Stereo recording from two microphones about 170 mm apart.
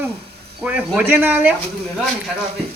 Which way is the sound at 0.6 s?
5° right (ahead or behind).